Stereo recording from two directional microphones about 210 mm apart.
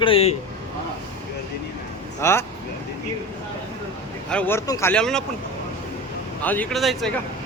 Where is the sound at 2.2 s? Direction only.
10° left (ahead or behind).